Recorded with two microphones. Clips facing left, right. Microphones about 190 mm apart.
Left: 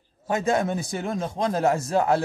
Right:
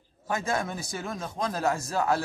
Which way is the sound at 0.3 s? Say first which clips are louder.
Left 6 dB; 25° left (ahead or behind).